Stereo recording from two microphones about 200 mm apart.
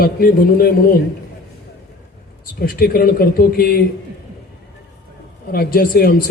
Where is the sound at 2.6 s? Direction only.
45° left (ahead or behind).